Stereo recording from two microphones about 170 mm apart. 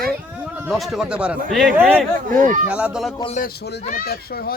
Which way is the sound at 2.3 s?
50° right (ahead or behind).